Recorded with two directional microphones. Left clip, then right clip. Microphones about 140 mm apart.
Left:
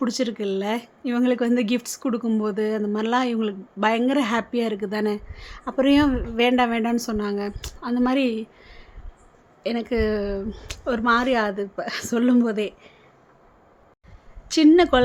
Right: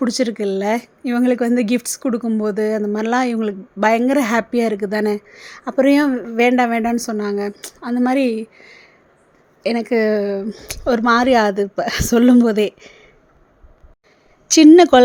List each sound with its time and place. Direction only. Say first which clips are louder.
0.0 s a woman's voice: right 6 dB; 35° right (ahead or behind)
10.8 s a woman's voice: right 6 dB; 50° right (ahead or behind)
14.4 s a woman's voice: right 8 dB; 45° right (ahead or behind)